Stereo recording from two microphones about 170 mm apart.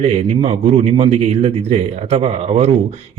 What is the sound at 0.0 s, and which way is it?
Speech, 35° right (ahead or behind).